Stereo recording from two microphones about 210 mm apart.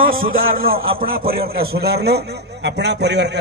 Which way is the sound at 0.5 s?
45° right (ahead or behind).